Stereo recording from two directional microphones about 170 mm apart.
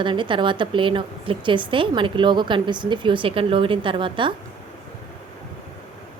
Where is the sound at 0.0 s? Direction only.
30° right (ahead or behind).